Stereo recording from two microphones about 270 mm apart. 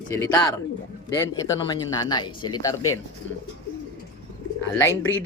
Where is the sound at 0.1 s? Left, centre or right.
Centre.